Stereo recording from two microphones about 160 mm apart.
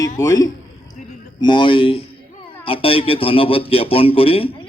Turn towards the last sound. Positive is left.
turn(degrees=35)  # may be behind; listen again after turning